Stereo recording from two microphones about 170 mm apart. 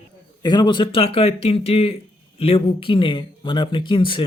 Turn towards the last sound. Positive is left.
turn(degrees=30)  # may be behind; listen again after turning